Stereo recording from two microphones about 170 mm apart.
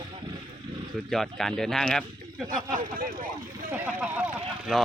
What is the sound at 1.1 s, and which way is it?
Speech, centre (ahead or behind).